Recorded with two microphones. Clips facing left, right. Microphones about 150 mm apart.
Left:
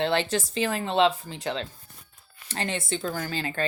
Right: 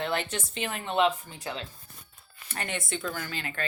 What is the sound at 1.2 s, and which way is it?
Speech, 90° left.